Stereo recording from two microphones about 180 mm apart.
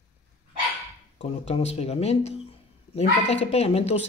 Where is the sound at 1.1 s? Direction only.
35° left (ahead or behind).